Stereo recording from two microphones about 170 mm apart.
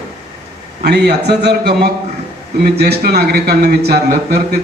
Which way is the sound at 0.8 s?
75° right (ahead or behind).